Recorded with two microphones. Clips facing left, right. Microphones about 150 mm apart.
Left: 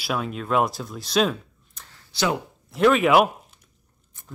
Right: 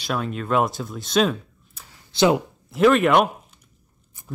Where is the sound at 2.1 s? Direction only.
20° right (ahead or behind).